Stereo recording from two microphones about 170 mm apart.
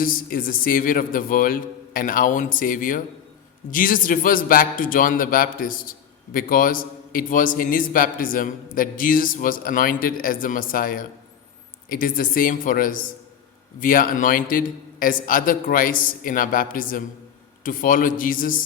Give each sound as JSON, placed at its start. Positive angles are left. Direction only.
{"t": 0.0, "sound": "a man's voice", "side_deg": 55}